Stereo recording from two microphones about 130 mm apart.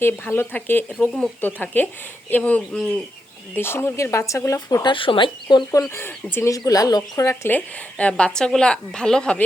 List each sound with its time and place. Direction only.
0.0 s a woman's voice: 15° left (ahead or behind)
3.5 s speech: 20° left (ahead or behind)
4.9 s speech: 40° left (ahead or behind)
5.9 s speech: 15° left (ahead or behind)
7.5 s a woman's voice: 10° left (ahead or behind)